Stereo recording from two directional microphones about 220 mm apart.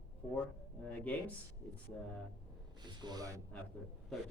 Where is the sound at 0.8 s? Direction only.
5° left (ahead or behind).